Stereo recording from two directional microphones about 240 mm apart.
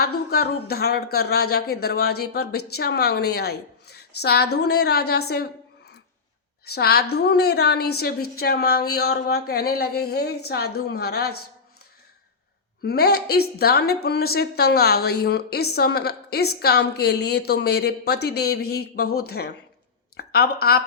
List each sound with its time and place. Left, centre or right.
0.0 s a woman's voice: left
6.7 s a woman's voice: left
12.8 s a woman's voice: left